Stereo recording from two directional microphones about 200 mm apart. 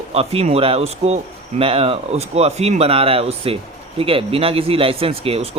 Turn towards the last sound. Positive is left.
turn(degrees=-30)  # may be behind; listen again after turning